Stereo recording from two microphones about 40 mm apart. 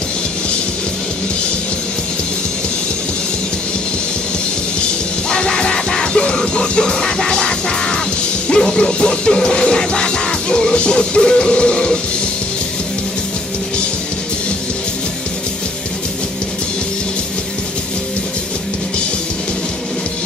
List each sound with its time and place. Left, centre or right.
5.3 s music: left